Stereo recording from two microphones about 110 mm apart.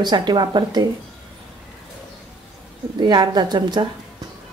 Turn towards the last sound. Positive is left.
turn(degrees=-40)  # may be behind; listen again after turning